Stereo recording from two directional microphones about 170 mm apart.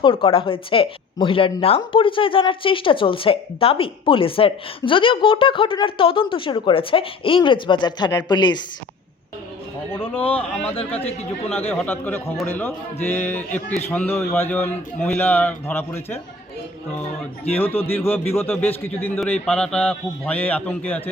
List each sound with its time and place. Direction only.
0.0 s speech: 30° left (ahead or behind)
9.9 s a man's voice: 10° left (ahead or behind)
11.0 s speech: 35° left (ahead or behind)
11.7 s a man's voice: 10° left (ahead or behind)
17.5 s a man's voice: 10° left (ahead or behind)